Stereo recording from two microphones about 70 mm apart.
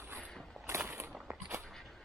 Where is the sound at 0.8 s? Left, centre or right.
Right.